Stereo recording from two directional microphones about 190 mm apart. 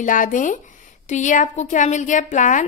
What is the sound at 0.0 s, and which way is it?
A woman's voice, 45° left (ahead or behind).